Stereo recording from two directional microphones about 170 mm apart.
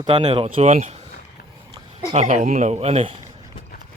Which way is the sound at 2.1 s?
45° right (ahead or behind).